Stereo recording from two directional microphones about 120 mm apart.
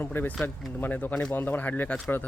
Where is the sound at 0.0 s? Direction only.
15° left (ahead or behind).